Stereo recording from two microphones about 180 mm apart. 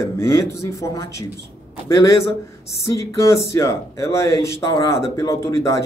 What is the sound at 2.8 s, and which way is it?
Speech, 15° left (ahead or behind).